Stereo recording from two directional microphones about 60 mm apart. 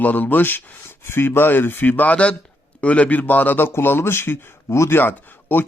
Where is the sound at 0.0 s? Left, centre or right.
Left.